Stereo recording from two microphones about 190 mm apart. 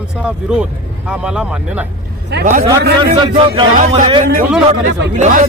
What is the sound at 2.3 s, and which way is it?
Speech, 60° right (ahead or behind).